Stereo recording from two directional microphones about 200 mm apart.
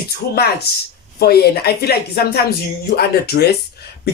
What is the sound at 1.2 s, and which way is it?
Speech, 55° left (ahead or behind).